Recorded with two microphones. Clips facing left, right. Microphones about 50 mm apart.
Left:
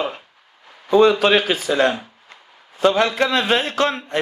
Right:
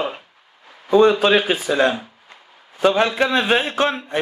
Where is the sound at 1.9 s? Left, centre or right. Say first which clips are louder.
Right 1 dB; centre.